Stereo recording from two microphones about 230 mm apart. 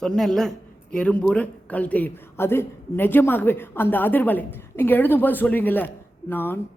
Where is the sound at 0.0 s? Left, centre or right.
Centre.